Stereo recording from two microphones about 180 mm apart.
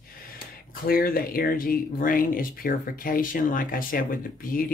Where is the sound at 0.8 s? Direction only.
55° left (ahead or behind).